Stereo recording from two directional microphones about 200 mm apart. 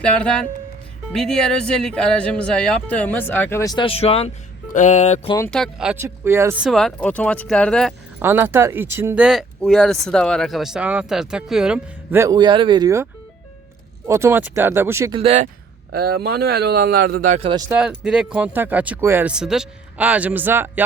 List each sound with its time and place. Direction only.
0.0 s speech: 5° left (ahead or behind); by 5.3 s 35° left (ahead or behind)
5.5 s speech: centre (ahead or behind)
8.2 s speech: 10° right (ahead or behind)
12.2 s speech: 20° right (ahead or behind)
14.1 s speech: 10° right (ahead or behind)
15.1 s speech: 30° right (ahead or behind)
15.9 s speech: 50° right (ahead or behind)
17.7 s speech: 5° right (ahead or behind)